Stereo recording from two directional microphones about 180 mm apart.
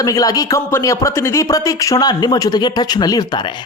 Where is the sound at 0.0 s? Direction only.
20° left (ahead or behind).